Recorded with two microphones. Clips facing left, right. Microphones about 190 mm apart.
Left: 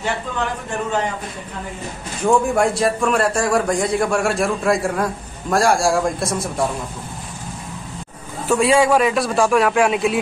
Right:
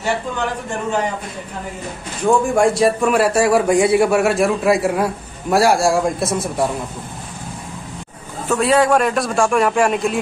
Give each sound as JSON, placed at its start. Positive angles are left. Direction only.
{"t": 2.5, "sound": "a man's voice", "side_deg": 0}
{"t": 8.5, "sound": "a man's voice", "side_deg": 0}